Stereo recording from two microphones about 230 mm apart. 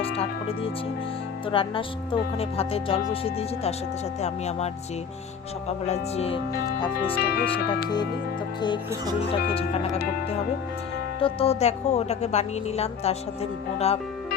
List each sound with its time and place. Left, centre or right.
0.2 s music: left
1.5 s speech: left
7.2 s speech: left
11.2 s speech: left